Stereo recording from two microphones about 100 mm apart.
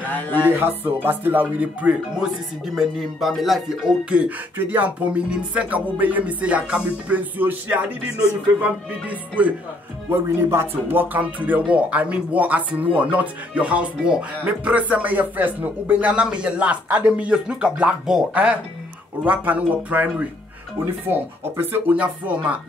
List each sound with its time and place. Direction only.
0.0 s music: 20° left (ahead or behind)
0.5 s speech: 20° right (ahead or behind)
9.4 s speech: 15° right (ahead or behind)